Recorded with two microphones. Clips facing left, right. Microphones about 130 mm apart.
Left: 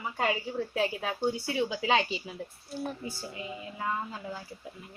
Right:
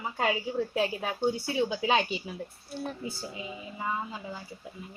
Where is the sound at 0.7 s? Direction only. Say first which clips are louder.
Left 1 dB; 10° right (ahead or behind).